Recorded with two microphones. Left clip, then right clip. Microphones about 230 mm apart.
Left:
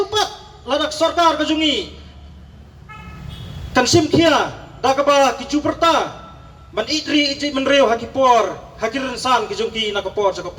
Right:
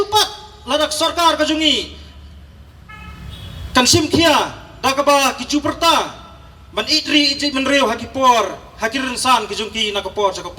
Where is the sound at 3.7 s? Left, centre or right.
Right.